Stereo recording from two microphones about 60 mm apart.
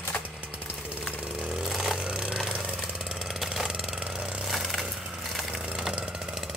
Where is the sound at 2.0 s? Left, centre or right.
Centre.